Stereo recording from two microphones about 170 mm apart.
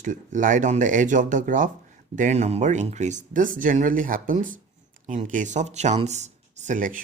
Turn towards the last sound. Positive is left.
turn(degrees=-50)  # may be behind; listen again after turning